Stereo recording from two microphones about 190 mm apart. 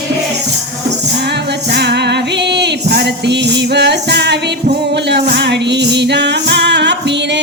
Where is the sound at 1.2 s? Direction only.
60° right (ahead or behind).